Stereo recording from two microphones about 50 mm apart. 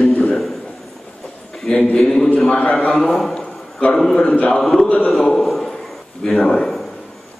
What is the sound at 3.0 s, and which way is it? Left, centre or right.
Speech, centre.